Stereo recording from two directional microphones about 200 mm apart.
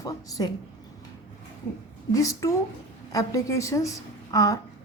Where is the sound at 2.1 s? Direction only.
15° left (ahead or behind).